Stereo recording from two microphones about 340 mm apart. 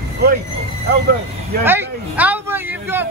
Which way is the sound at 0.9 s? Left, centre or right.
Right.